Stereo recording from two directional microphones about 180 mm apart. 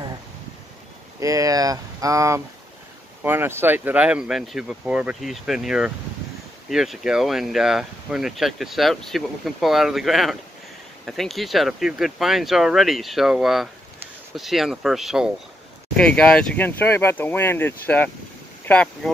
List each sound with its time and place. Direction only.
1.2 s speech: 20° right (ahead or behind); by 18.8 s 10° left (ahead or behind)